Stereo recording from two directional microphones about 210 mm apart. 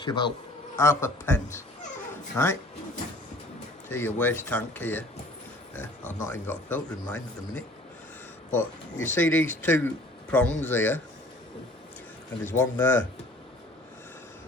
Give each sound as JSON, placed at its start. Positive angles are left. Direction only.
{"t": 0.0, "sound": "a man's voice", "side_deg": 20}
{"t": 3.8, "sound": "speech", "side_deg": 10}
{"t": 8.5, "sound": "speech", "side_deg": 10}
{"t": 12.5, "sound": "speech", "side_deg": 10}